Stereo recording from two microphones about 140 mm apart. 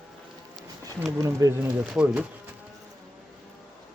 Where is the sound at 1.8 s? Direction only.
5° right (ahead or behind).